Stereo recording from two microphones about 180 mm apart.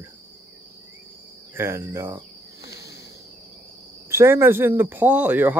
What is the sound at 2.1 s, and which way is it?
Cricket, 20° right (ahead or behind).